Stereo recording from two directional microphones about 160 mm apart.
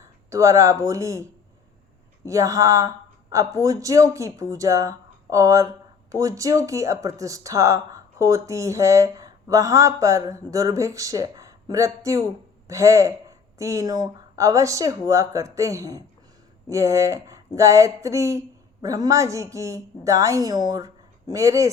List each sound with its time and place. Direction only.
0.3 s speech: 20° right (ahead or behind)